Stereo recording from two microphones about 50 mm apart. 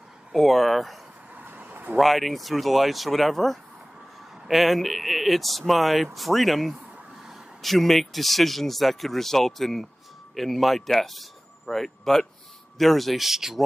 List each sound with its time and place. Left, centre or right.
0.3 s speech: centre
1.4 s vehicle: right
2.0 s speech: centre